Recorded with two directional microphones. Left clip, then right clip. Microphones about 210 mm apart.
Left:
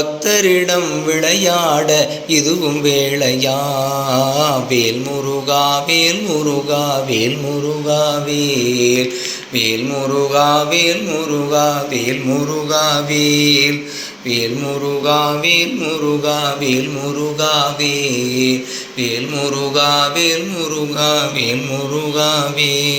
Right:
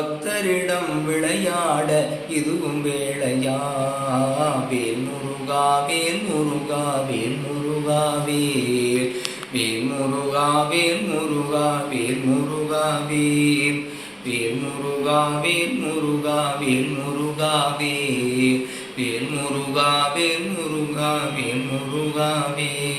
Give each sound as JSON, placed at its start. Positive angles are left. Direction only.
{"t": 0.3, "sound": "a man's voice", "side_deg": 40}
{"t": 5.5, "sound": "a man's voice", "side_deg": 40}
{"t": 7.9, "sound": "mantra", "side_deg": 25}
{"t": 10.3, "sound": "mantra", "side_deg": 30}
{"t": 12.7, "sound": "a man's voice", "side_deg": 35}
{"t": 16.2, "sound": "a man's voice", "side_deg": 30}
{"t": 19.7, "sound": "mantra", "side_deg": 30}